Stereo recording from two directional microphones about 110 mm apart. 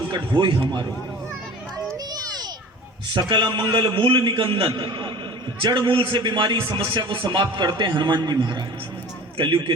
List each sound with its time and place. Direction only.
0.1 s a man's voice: 45° right (ahead or behind)
1.9 s children playing: 35° right (ahead or behind)
3.1 s a man's voice: 45° right (ahead or behind)
9.4 s a man's voice: 55° right (ahead or behind)